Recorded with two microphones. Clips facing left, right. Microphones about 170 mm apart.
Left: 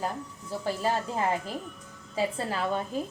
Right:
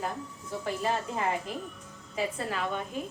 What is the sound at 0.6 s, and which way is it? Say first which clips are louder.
A woman's voice: left 2 dB; 35° left (ahead or behind).